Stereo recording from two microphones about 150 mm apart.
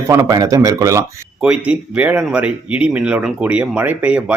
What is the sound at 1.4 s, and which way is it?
Speech, 10° right (ahead or behind).